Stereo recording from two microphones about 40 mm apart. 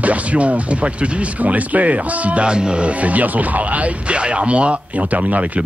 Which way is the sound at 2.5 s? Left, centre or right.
Right.